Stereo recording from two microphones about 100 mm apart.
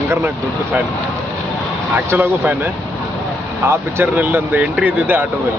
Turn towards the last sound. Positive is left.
turn(degrees=-20)  # may be behind; listen again after turning